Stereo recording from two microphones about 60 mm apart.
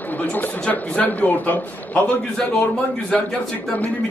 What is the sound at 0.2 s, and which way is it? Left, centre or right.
A man's voice, left.